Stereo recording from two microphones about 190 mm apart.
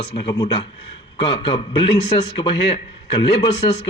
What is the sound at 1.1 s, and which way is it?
A man's voice, 30° left (ahead or behind).